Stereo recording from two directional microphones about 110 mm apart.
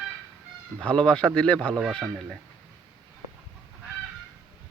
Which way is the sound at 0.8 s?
10° left (ahead or behind).